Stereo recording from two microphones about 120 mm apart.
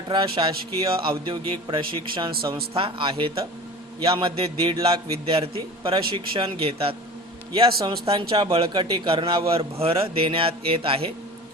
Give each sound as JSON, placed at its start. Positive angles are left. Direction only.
{"t": 0.1, "sound": "a man's voice", "side_deg": -45}